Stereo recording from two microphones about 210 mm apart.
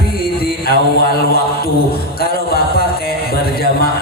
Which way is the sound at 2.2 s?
45° left (ahead or behind).